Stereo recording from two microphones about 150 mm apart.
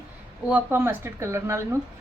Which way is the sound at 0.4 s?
10° right (ahead or behind).